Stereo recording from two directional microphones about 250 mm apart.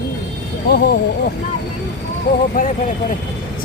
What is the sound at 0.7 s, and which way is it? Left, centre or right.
Speech, left.